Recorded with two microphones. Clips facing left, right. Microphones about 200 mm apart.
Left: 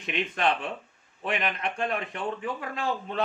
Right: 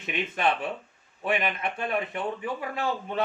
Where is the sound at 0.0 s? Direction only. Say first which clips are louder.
Even; 5° right (ahead or behind).